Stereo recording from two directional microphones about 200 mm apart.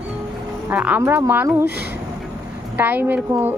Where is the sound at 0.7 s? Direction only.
5° right (ahead or behind).